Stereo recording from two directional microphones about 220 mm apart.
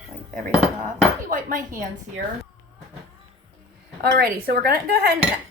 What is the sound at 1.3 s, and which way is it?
Dishes, 40° right (ahead or behind).